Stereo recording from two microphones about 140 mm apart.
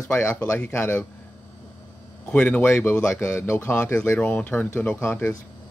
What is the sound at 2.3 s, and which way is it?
A man's voice, 10° left (ahead or behind).